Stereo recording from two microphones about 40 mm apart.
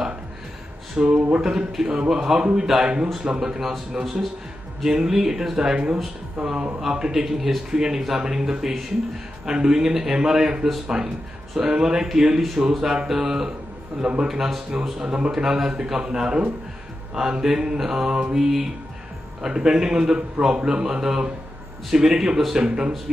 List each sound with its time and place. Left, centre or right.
0.9 s a man's voice: right
22.6 s a man's voice: right